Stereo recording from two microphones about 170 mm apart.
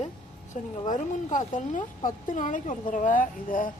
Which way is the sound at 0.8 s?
50° left (ahead or behind).